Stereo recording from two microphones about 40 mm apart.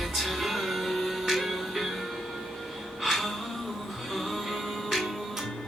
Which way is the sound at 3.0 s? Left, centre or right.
Centre.